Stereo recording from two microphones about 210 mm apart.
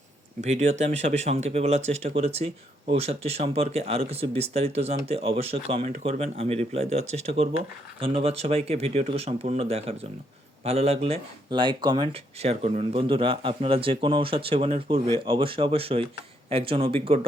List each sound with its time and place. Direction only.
0.4 s speech: 35° right (ahead or behind)